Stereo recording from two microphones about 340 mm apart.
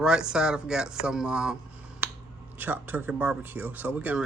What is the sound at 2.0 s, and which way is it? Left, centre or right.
Finger snapping, centre.